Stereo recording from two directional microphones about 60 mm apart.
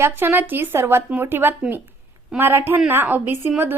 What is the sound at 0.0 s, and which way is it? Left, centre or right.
Speech, right.